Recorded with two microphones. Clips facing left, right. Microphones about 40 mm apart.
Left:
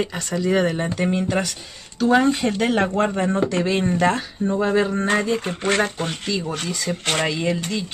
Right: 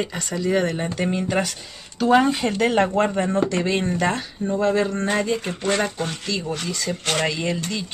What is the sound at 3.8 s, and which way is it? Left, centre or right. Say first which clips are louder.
Speech: left 3 dB; centre.